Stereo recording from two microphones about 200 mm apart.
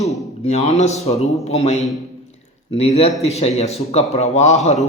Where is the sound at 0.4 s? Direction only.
35° left (ahead or behind).